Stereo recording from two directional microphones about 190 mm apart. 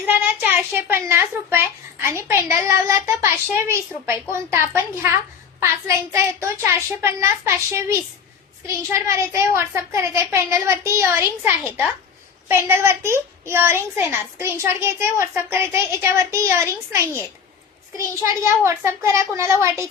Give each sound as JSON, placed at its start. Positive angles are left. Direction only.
{"t": 0.0, "sound": "a child's voice", "side_deg": -10}
{"t": 18.6, "sound": "a child's voice", "side_deg": -15}